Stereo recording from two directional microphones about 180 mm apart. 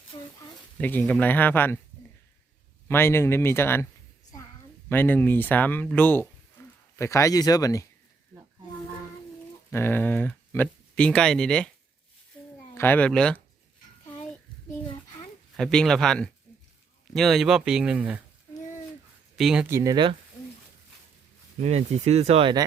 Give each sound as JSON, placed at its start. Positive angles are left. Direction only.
{"t": 0.1, "sound": "a sound", "side_deg": 25}
{"t": 0.8, "sound": "speech", "side_deg": 10}
{"t": 2.9, "sound": "speech", "side_deg": 15}
{"t": 4.9, "sound": "speech", "side_deg": 10}
{"t": 9.6, "sound": "speech", "side_deg": 15}
{"t": 12.4, "sound": "a sound", "side_deg": 5}
{"t": 12.7, "sound": "speech", "side_deg": 10}
{"t": 14.8, "sound": "a sound", "side_deg": 25}
{"t": 15.5, "sound": "speech", "side_deg": 5}
{"t": 19.4, "sound": "speech", "side_deg": -5}
{"t": 19.6, "sound": "speech", "side_deg": -15}
{"t": 21.6, "sound": "speech", "side_deg": -35}